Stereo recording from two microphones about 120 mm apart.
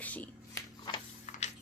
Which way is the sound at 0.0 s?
10° left (ahead or behind).